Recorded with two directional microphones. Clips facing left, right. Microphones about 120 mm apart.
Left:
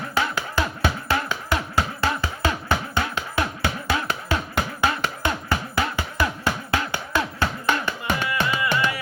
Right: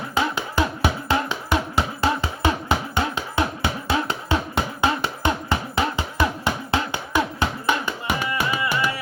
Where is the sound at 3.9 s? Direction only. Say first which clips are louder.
Right 3 dB; 25° right (ahead or behind).